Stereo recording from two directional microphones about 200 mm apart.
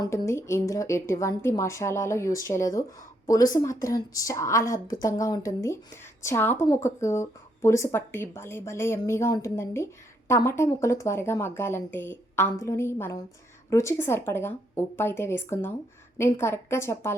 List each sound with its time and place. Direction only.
0.0 s speech: 15° left (ahead or behind)